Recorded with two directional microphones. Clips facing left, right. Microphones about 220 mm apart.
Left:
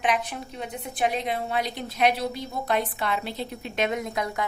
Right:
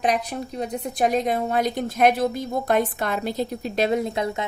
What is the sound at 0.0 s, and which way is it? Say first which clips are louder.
A woman's voice: right 3 dB; 40° right (ahead or behind).